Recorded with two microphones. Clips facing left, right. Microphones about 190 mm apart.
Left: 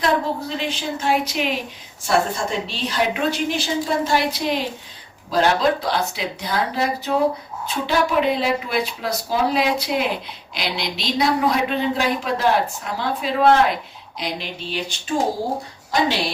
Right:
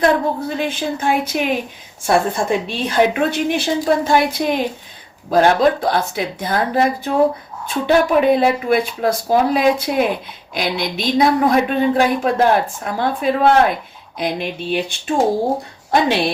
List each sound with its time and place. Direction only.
0.0 s a woman's voice: 50° right (ahead or behind)